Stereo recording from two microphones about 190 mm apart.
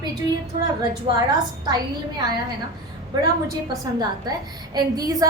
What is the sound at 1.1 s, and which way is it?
Speech, 25° right (ahead or behind).